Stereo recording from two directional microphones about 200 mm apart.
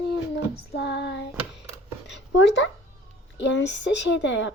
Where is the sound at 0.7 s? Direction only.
60° left (ahead or behind).